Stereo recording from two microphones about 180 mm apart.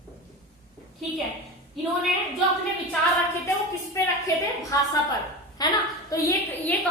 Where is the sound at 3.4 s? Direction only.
15° left (ahead or behind).